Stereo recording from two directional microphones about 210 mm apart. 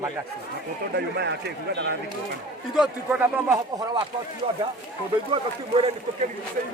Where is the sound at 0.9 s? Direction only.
55° right (ahead or behind).